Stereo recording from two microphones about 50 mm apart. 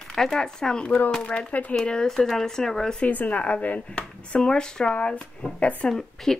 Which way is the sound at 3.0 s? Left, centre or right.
Left.